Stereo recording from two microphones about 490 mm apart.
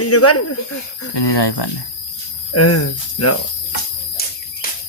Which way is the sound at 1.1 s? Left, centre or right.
Left.